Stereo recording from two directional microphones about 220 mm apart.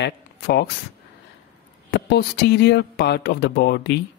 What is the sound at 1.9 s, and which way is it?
A woman's voice, 50° left (ahead or behind).